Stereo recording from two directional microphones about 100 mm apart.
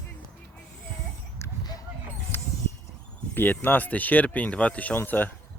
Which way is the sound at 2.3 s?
25° left (ahead or behind).